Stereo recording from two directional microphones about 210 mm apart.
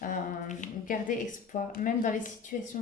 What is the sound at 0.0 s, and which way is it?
Speech, 40° left (ahead or behind).